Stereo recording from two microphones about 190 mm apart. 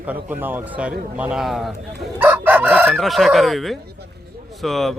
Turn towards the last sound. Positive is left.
turn(degrees=0)  # may be behind; listen again after turning